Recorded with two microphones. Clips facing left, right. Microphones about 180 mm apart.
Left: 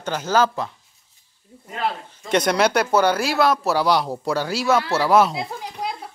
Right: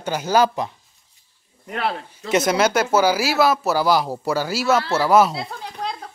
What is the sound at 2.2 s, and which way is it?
Speech, 5° right (ahead or behind).